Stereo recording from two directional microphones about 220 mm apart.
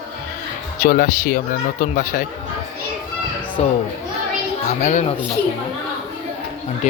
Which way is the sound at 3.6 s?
30° left (ahead or behind).